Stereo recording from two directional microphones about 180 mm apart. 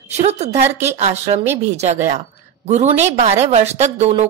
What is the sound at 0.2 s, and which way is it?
A woman's voice, 35° right (ahead or behind).